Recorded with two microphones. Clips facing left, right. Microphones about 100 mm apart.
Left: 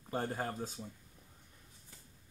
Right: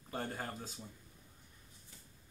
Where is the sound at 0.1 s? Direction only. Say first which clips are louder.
Left 4 dB; 30° left (ahead or behind).